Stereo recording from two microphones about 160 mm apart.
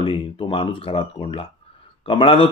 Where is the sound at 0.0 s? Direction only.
35° left (ahead or behind).